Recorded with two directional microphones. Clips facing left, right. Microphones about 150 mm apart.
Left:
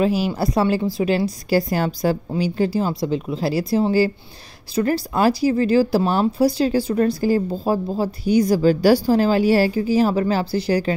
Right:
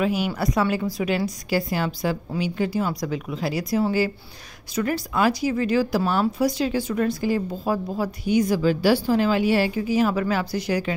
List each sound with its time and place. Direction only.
0.0 s a woman's voice: 30° left (ahead or behind)